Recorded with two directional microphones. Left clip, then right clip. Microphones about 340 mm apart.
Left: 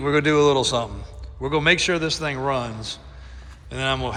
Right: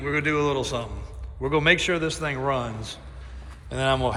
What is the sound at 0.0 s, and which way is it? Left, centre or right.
Speech, centre.